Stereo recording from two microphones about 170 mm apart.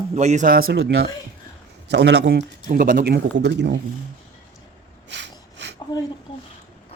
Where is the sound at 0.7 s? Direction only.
80° right.